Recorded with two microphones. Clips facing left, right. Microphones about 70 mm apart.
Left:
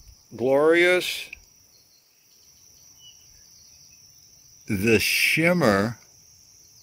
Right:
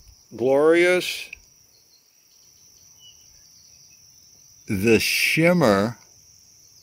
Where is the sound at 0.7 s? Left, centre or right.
Left.